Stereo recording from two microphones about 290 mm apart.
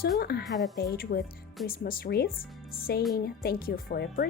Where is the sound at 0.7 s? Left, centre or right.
Left.